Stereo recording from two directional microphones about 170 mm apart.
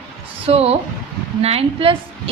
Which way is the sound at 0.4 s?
35° right (ahead or behind).